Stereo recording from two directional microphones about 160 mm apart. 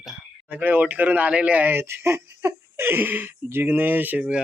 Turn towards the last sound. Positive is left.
turn(degrees=-10)  # may be behind; listen again after turning